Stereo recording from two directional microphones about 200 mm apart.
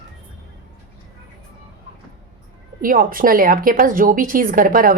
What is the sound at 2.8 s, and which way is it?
A woman's voice, 45° right (ahead or behind).